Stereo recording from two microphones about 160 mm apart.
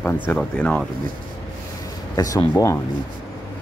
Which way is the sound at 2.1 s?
20° left (ahead or behind).